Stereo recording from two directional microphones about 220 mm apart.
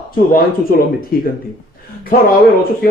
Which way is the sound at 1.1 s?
40° left (ahead or behind).